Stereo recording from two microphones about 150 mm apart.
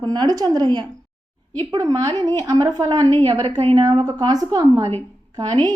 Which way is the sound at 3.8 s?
25° right (ahead or behind).